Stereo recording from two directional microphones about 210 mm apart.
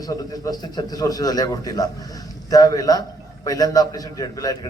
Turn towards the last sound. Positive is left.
turn(degrees=15)  # may be behind; listen again after turning